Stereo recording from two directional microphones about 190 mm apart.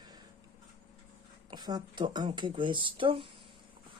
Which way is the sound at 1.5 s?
20° right (ahead or behind).